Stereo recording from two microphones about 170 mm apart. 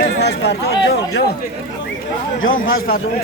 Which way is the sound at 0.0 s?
80° left.